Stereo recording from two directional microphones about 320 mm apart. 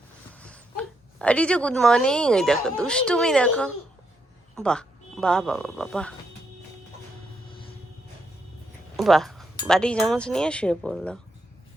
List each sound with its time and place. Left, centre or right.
0.3 s speech: centre
9.0 s speech: centre